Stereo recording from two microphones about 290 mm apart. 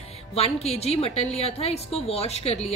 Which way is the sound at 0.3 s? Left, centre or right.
Left.